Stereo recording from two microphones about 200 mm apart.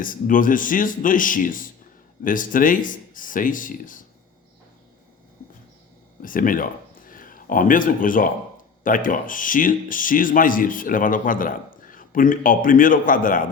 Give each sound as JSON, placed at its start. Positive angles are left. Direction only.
{"t": 0.0, "sound": "speech", "side_deg": 45}
{"t": 6.2, "sound": "speech", "side_deg": 45}